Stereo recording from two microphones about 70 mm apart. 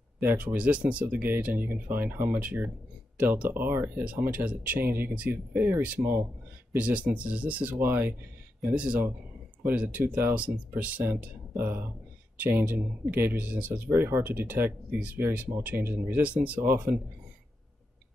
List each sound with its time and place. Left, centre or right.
0.2 s speech: right
11.5 s speech: right
13.8 s speech: right